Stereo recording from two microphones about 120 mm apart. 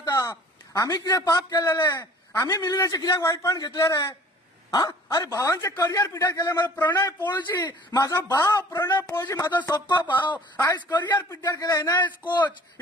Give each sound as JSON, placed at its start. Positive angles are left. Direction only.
{"t": 0.0, "sound": "a man's voice", "side_deg": 25}
{"t": 7.0, "sound": "a man's voice", "side_deg": 20}
{"t": 10.0, "sound": "speech", "side_deg": 40}
{"t": 10.3, "sound": "speech", "side_deg": 15}
{"t": 10.9, "sound": "a man's voice", "side_deg": 35}